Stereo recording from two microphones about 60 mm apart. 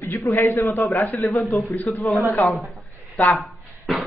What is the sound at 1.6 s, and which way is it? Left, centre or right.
Speech, left.